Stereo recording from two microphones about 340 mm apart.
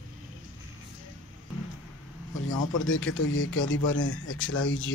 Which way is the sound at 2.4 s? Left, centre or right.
Left.